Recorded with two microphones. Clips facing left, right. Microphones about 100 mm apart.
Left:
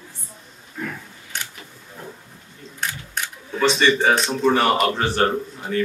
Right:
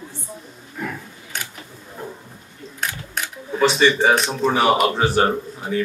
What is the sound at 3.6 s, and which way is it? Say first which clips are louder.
Speech: right 2 dB; 10° right (ahead or behind).